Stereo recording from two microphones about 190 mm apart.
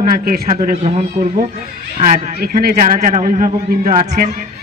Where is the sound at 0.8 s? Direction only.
35° right (ahead or behind).